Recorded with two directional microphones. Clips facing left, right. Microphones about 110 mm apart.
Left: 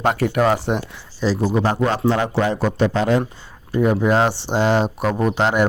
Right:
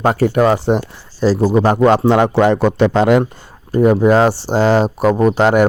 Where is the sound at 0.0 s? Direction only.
40° right (ahead or behind).